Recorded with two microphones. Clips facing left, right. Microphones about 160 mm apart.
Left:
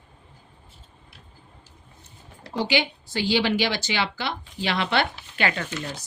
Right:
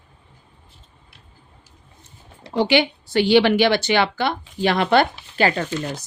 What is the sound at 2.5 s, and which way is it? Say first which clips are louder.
Speech: right 7 dB; 65° right (ahead or behind).